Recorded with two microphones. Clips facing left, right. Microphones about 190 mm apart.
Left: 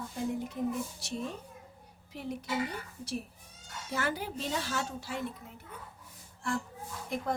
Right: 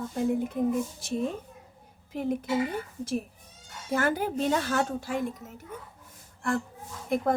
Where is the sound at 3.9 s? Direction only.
50° right (ahead or behind).